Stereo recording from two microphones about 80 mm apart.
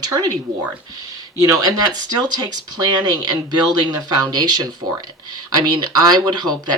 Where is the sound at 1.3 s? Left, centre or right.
Right.